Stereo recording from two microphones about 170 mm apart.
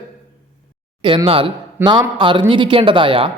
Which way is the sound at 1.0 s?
30° right (ahead or behind).